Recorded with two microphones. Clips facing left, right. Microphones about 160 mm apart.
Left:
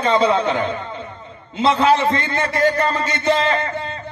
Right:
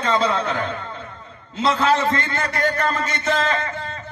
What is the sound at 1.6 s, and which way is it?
Speech, 25° left (ahead or behind).